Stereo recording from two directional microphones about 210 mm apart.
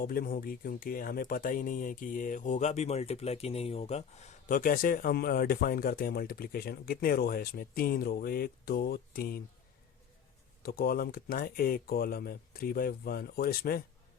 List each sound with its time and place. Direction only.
0.0 s speech: 45° left (ahead or behind)
10.6 s speech: 45° left (ahead or behind)